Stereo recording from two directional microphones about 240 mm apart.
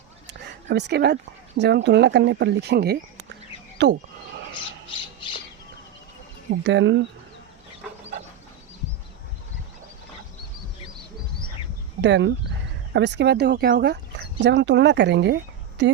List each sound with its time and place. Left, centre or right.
0.3 s speech: right
6.7 s speech: right
12.0 s speech: right